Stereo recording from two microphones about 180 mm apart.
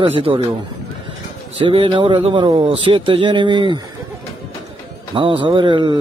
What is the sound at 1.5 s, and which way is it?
Speech, 30° right (ahead or behind).